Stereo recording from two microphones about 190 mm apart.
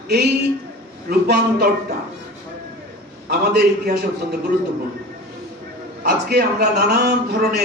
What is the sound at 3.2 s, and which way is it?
Speech, 55° right (ahead or behind).